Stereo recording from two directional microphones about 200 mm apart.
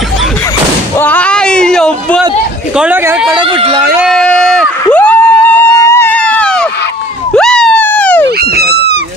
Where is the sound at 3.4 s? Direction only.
25° right (ahead or behind).